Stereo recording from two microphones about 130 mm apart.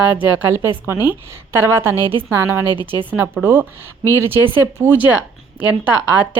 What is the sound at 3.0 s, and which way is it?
Speech, 15° right (ahead or behind).